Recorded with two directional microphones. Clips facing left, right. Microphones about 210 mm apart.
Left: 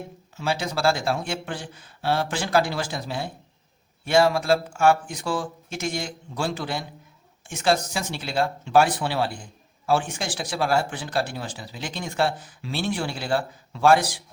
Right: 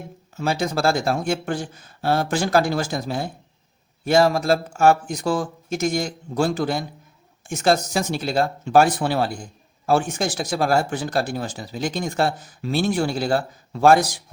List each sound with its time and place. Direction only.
0.3 s speech: 45° right (ahead or behind)